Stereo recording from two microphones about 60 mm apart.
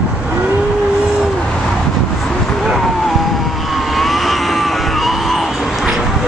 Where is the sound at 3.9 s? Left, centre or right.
Centre.